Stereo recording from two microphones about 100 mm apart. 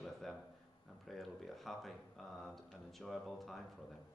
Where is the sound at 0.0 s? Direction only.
Centre (ahead or behind).